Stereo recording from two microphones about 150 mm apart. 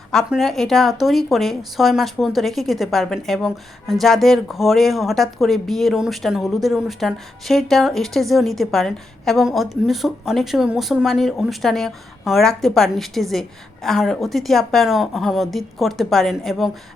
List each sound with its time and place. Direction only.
0.1 s speech: centre (ahead or behind)